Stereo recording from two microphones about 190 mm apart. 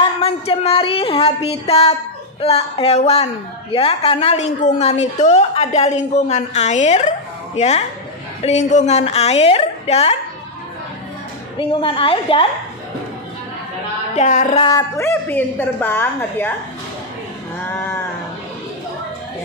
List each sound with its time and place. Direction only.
0.2 s a woman's voice: 30° left (ahead or behind)
11.5 s a woman's voice: 25° left (ahead or behind)
14.1 s a woman's voice: 40° left (ahead or behind)
14.6 s a woman's voice: 20° left (ahead or behind)
17.6 s a sound: 10° left (ahead or behind)